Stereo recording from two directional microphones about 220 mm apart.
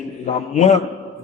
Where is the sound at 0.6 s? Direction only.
30° left (ahead or behind).